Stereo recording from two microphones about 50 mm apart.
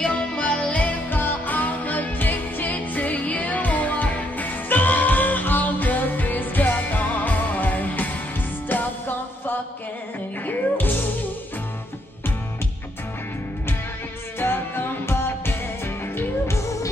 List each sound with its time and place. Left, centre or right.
0.0 s music: centre
1.1 s music: left
14.4 s music: left
16.5 s music: left